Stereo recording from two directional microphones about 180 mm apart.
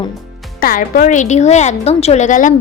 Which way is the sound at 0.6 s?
50° left (ahead or behind).